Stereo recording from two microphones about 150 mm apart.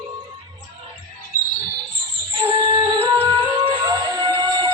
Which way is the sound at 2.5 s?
35° right (ahead or behind).